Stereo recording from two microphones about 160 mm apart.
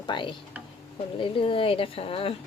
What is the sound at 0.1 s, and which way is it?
Speech, 30° left (ahead or behind).